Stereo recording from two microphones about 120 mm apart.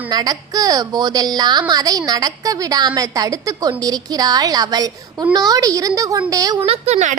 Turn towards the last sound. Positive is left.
turn(degrees=-75)  # may be behind; listen again after turning